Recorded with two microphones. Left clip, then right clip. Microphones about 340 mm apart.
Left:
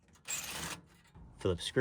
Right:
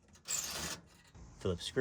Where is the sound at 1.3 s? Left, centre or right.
Left.